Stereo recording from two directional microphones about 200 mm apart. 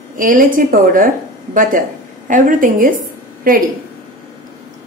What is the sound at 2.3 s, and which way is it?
Speech, 40° right (ahead or behind).